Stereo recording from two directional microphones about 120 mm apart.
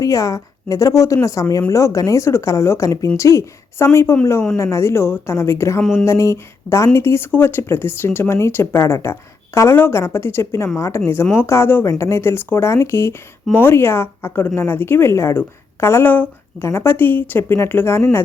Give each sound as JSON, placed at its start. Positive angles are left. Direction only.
{"t": 0.0, "sound": "speech", "side_deg": 25}
{"t": 5.8, "sound": "a sound", "side_deg": 5}
{"t": 6.1, "sound": "speech", "side_deg": 25}